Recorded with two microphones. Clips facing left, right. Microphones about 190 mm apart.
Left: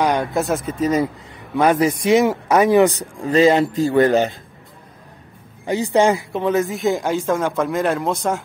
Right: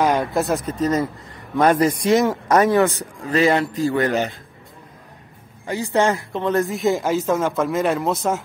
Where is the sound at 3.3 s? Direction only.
25° left (ahead or behind).